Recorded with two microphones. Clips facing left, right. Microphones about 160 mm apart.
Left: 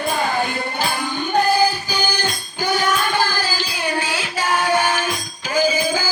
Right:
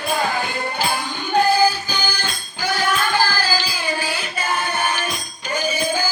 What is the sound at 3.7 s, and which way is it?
Music, 70° left (ahead or behind).